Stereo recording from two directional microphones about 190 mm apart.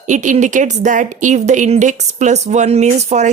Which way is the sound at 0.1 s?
40° right (ahead or behind).